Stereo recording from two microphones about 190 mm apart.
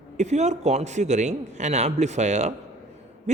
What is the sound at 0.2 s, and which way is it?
Speech, 35° right (ahead or behind).